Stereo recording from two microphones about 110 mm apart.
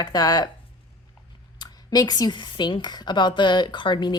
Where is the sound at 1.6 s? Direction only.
35° left (ahead or behind).